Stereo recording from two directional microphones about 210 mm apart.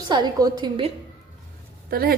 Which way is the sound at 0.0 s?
20° right (ahead or behind).